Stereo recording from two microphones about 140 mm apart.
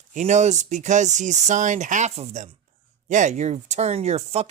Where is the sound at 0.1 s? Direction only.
60° right (ahead or behind).